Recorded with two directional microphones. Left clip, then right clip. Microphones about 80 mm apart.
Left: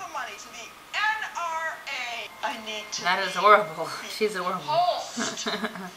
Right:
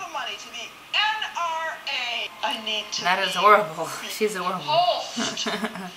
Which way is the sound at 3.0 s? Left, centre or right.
Centre.